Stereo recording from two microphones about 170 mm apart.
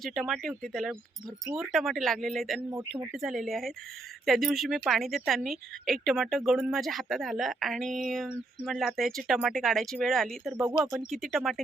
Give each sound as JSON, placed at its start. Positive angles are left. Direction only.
{"t": 0.0, "sound": "a woman's voice", "side_deg": 0}